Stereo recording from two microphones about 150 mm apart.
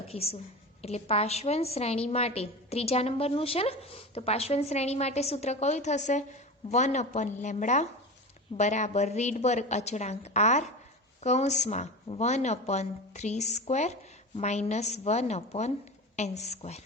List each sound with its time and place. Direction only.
0.1 s a woman's voice: 40° left (ahead or behind)